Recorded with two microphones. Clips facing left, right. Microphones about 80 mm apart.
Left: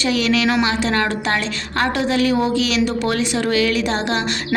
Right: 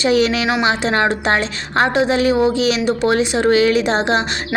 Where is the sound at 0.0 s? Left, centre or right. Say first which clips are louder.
Right 3 dB; right.